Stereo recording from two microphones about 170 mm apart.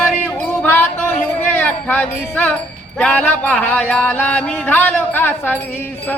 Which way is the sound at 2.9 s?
10° left (ahead or behind).